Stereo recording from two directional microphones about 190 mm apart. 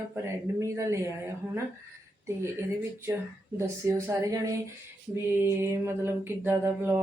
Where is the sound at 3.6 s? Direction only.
15° right (ahead or behind).